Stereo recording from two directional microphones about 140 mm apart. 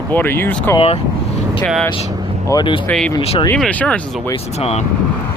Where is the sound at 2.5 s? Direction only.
35° left (ahead or behind).